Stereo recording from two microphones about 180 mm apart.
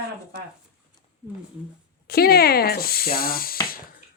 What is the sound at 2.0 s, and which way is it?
Speech, 60° left (ahead or behind).